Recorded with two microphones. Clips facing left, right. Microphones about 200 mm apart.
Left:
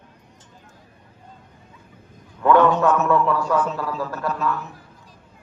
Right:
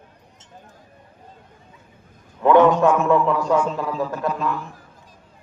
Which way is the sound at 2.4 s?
20° right (ahead or behind).